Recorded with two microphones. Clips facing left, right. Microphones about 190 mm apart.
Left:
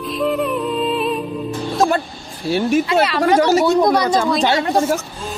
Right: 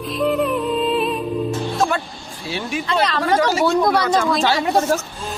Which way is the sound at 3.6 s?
20° left (ahead or behind).